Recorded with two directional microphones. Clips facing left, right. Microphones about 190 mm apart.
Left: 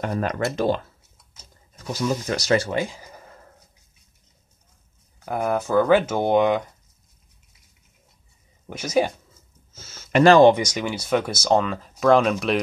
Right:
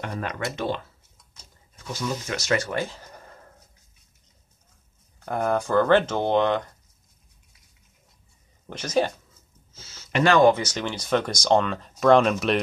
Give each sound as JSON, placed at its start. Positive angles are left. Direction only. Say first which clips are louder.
{"t": 0.0, "sound": "speech", "louder": "left 6 dB", "side_deg": 40}
{"t": 1.8, "sound": "speech", "louder": "left 5 dB", "side_deg": 40}
{"t": 2.7, "sound": "a sound", "louder": "left 3 dB", "side_deg": 10}
{"t": 5.2, "sound": "speech", "louder": "left 1 dB", "side_deg": 5}
{"t": 8.6, "sound": "speech", "louder": "left 2 dB", "side_deg": 10}
{"t": 9.8, "sound": "speech", "louder": "left 6 dB", "side_deg": 50}
{"t": 10.5, "sound": "speech", "louder": "left 3 dB", "side_deg": 10}